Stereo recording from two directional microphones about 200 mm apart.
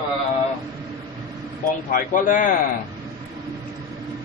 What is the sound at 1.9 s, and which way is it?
Speech, 40° left (ahead or behind).